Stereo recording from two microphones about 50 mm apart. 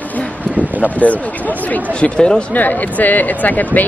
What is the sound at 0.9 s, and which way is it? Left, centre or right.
Speech, left.